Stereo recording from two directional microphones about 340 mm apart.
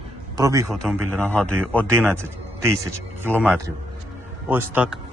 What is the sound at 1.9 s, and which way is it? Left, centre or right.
A man's voice, centre.